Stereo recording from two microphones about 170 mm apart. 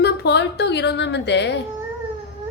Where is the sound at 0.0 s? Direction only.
75° left (ahead or behind); by 1.5 s 90° left.